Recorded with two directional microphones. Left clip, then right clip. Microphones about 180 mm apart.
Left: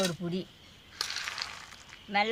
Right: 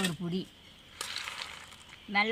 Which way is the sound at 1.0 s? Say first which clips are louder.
Left 3 dB; 10° right (ahead or behind).